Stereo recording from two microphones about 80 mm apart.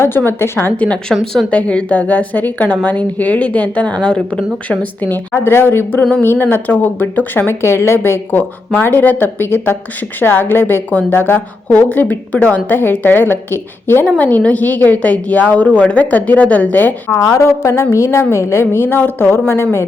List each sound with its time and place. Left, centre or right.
0.3 s speech: left
0.8 s a woman's voice: centre
1.1 s speech: centre
17.3 s a woman's voice: left